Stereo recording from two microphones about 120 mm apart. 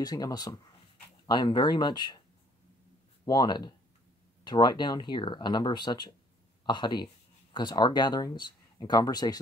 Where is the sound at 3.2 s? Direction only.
35° left (ahead or behind).